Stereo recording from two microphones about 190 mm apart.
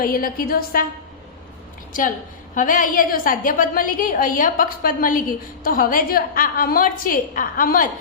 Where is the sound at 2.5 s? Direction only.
45° left (ahead or behind).